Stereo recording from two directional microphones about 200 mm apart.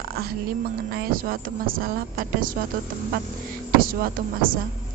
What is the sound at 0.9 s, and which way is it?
Speech, 45° right (ahead or behind).